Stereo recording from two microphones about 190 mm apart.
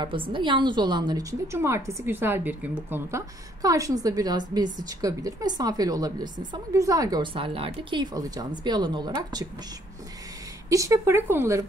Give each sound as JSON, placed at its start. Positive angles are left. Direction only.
{"t": 0.0, "sound": "a woman's voice", "side_deg": -25}
{"t": 10.7, "sound": "speech", "side_deg": -15}